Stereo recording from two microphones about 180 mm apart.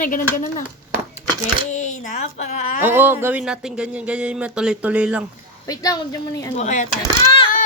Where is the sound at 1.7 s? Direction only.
40° left (ahead or behind).